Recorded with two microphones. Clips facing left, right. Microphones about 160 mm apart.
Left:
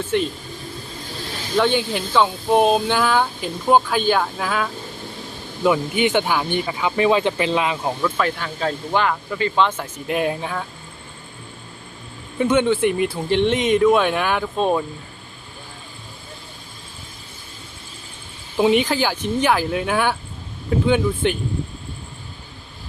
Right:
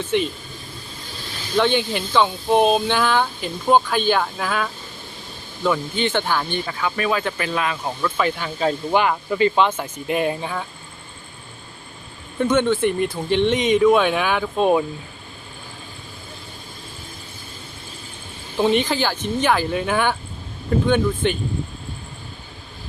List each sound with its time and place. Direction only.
1.5 s speech: 5° left (ahead or behind)
5.6 s speech: 15° left (ahead or behind)
8.0 s speech: centre (ahead or behind)
8.6 s speech: 15° right (ahead or behind)
9.6 s speech: centre (ahead or behind)
12.4 s speech: 5° left (ahead or behind); by 14.8 s 10° right (ahead or behind)
18.5 s speech: 5° left (ahead or behind)